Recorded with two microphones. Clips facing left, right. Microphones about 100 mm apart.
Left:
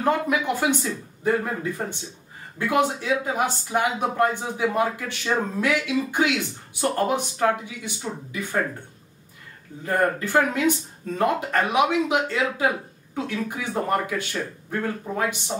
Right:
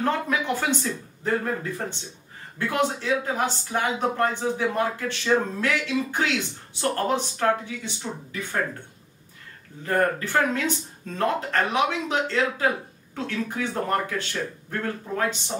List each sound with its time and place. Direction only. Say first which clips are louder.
0.0 s speech: left 3 dB; 15° left (ahead or behind)
9.8 s speech: left 1 dB; 15° left (ahead or behind)